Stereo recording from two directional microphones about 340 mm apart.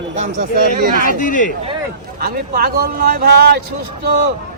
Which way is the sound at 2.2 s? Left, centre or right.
Right.